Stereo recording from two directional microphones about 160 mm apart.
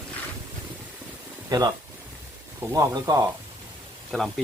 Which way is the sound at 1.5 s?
25° right (ahead or behind).